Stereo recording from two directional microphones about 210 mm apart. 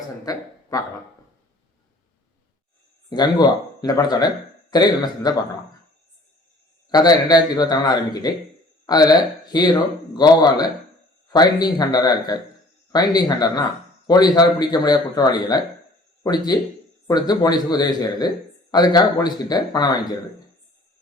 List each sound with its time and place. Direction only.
0.7 s speech: 15° left (ahead or behind)
3.1 s a man's voice: 20° left (ahead or behind)
6.9 s a man's voice: 20° left (ahead or behind)